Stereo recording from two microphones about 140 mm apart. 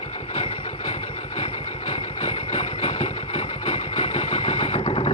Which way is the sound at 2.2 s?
45° left (ahead or behind).